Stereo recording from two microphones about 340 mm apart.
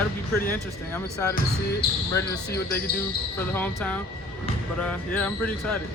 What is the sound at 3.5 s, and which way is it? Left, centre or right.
Speech, centre.